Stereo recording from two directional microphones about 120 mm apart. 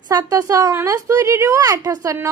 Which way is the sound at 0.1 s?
30° right (ahead or behind).